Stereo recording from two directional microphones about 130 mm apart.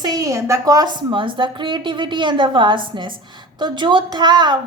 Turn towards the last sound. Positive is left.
turn(degrees=-35)  # may be behind; listen again after turning